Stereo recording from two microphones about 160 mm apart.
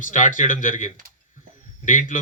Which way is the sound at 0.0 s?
55° left (ahead or behind).